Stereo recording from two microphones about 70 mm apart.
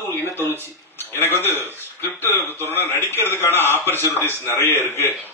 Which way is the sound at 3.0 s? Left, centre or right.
Right.